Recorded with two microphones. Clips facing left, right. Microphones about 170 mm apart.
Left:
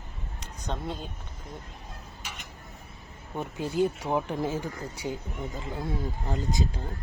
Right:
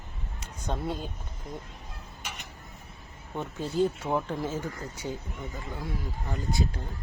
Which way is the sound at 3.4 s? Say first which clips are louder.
Even; 15° left (ahead or behind).